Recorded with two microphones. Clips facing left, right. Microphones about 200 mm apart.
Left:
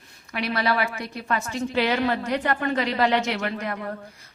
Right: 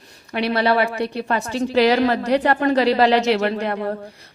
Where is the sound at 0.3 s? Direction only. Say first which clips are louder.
Right 6 dB; 30° right (ahead or behind).